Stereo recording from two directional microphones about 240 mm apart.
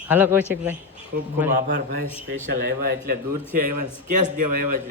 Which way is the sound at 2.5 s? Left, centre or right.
Right.